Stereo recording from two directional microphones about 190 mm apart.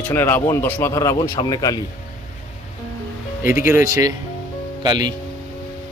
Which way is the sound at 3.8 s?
20° right (ahead or behind).